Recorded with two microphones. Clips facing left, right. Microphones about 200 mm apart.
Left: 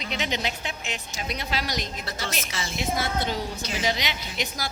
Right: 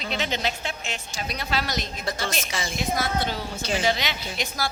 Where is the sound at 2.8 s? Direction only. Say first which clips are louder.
Right 1 dB; 25° left (ahead or behind).